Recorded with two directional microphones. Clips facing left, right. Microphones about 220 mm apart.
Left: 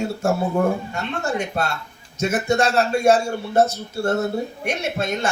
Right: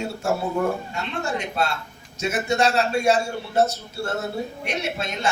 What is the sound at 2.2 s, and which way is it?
A man's voice, 50° left (ahead or behind).